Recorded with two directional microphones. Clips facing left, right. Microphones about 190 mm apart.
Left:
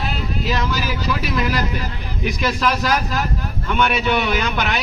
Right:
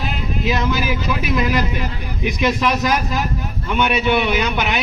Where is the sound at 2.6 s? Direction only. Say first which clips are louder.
Right 1 dB; 10° right (ahead or behind).